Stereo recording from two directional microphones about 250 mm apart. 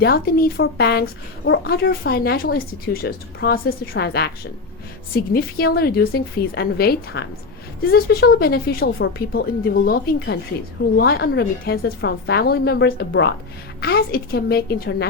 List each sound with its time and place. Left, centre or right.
0.0 s a woman's voice: left
5.3 s a woman's voice: left